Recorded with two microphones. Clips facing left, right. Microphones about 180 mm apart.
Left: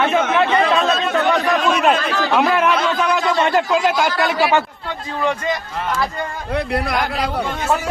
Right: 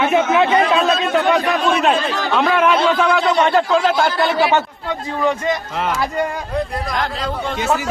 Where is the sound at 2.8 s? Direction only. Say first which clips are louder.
Right 3 dB; 25° right (ahead or behind).